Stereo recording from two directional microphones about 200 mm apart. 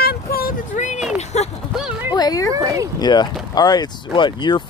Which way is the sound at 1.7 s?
5° right (ahead or behind).